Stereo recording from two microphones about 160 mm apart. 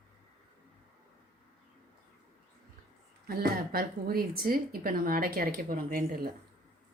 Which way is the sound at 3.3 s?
70° right (ahead or behind).